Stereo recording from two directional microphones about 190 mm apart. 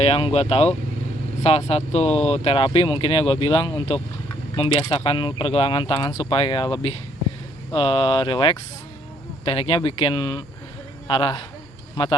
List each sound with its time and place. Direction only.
0.0 s speech: 30° left (ahead or behind)